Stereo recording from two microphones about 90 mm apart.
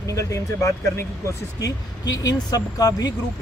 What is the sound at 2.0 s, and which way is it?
Speech, 45° left (ahead or behind).